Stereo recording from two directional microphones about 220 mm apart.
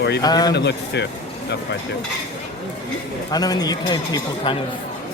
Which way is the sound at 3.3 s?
15° left (ahead or behind).